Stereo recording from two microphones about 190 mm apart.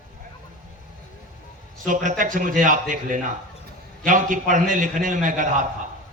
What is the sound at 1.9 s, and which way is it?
A man's voice, 45° right (ahead or behind).